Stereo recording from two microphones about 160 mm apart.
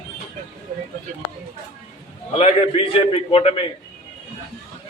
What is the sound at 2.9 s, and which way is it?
Speech, 35° left (ahead or behind).